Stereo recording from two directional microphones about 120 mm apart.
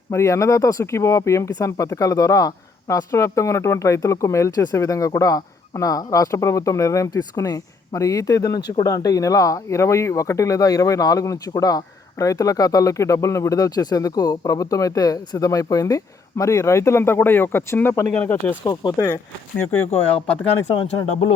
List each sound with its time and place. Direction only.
0.1 s speech: 25° left (ahead or behind)
18.6 s speech: 35° left (ahead or behind)
19.0 s speech: 15° left (ahead or behind)